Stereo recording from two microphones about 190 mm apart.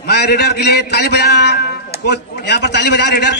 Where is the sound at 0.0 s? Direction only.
60° left (ahead or behind).